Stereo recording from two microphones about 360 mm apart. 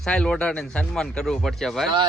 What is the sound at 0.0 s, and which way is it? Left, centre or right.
Speech, centre.